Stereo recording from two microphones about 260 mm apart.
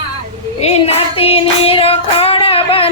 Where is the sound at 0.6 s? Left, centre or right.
Left.